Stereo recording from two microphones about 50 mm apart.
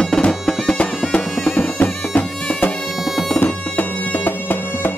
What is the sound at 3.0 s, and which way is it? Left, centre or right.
Bagpipes, centre.